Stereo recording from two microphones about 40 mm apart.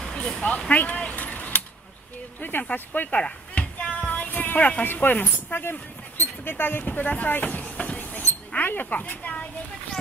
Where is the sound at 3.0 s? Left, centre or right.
Left.